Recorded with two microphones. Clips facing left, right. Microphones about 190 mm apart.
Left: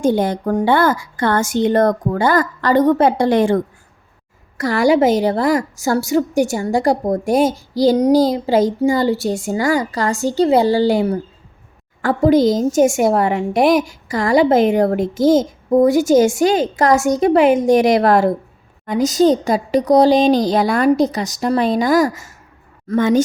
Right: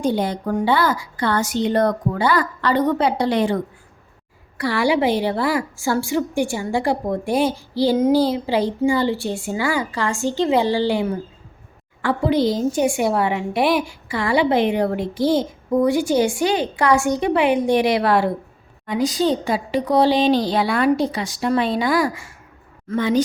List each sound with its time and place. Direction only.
0.0 s a woman's voice: 50° left (ahead or behind)